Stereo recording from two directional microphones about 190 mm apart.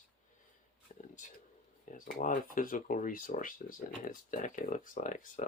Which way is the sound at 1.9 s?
45° left (ahead or behind).